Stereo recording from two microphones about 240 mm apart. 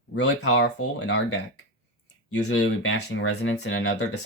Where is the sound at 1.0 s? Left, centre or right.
Left.